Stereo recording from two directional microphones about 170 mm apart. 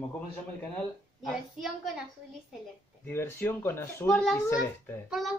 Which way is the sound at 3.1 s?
15° left (ahead or behind).